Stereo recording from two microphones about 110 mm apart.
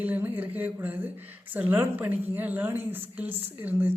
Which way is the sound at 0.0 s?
15° right (ahead or behind).